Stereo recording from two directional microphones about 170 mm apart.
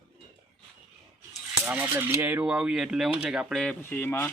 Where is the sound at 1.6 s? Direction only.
10° right (ahead or behind); by 4.2 s 15° left (ahead or behind).